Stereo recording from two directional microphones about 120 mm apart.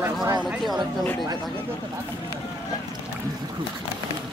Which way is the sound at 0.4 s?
5° right (ahead or behind).